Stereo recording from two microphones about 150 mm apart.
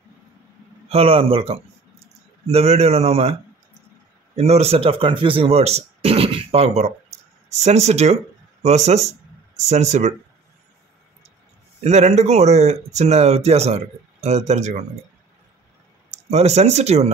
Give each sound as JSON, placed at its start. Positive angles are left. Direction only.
{"t": 0.8, "sound": "speech", "side_deg": -40}
{"t": 4.4, "sound": "speech", "side_deg": -45}
{"t": 11.8, "sound": "speech", "side_deg": -45}
{"t": 16.1, "sound": "speech", "side_deg": -45}